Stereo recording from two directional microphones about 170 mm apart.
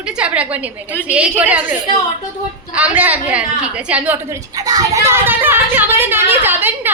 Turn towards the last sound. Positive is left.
turn(degrees=-10)  # may be behind; listen again after turning